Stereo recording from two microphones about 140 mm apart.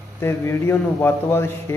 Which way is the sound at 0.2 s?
15° left (ahead or behind).